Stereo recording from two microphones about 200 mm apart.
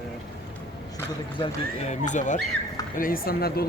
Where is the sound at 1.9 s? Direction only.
40° left (ahead or behind).